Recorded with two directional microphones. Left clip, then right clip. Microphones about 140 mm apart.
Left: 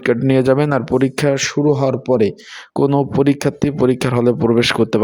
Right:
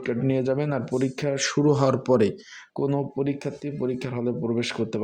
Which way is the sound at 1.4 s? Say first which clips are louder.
Left 6 dB; 20° left (ahead or behind).